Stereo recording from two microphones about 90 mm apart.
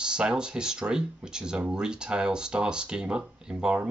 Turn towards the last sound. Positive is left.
turn(degrees=-10)  # may be behind; listen again after turning